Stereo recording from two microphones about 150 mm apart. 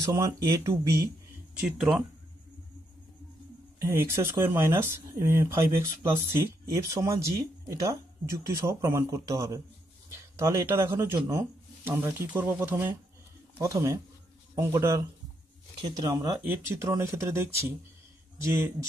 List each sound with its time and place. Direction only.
0.0 s speech: 20° right (ahead or behind)
3.8 s speech: 20° right (ahead or behind)
16.1 s speech: 20° right (ahead or behind)